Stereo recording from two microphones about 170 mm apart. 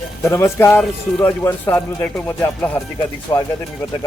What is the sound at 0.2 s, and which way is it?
Speech, 15° left (ahead or behind).